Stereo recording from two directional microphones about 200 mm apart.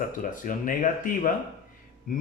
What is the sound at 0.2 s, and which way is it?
Speech, 40° left (ahead or behind).